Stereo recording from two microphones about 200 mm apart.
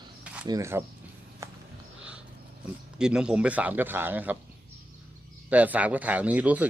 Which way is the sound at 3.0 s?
5° right (ahead or behind).